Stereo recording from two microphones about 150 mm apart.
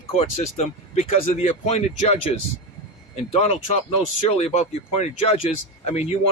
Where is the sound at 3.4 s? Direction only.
50° left (ahead or behind).